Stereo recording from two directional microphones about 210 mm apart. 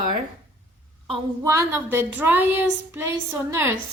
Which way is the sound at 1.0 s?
25° right (ahead or behind).